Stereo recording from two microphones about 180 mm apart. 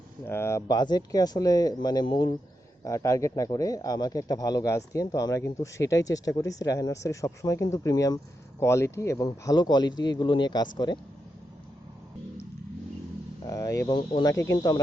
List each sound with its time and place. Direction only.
0.3 s speech: 15° left (ahead or behind)
13.5 s speech: 20° left (ahead or behind)